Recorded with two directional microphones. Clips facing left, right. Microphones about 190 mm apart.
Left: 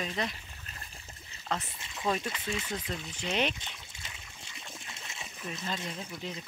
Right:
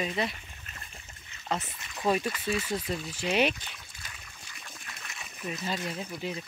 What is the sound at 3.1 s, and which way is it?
Speech, 10° right (ahead or behind).